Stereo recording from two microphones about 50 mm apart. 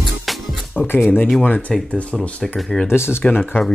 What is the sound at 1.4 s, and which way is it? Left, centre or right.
Speech, left.